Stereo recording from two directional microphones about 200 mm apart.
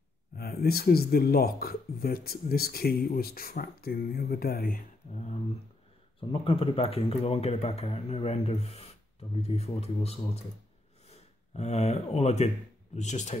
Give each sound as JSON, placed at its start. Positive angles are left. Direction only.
{"t": 0.4, "sound": "speech", "side_deg": 50}
{"t": 6.4, "sound": "speech", "side_deg": 25}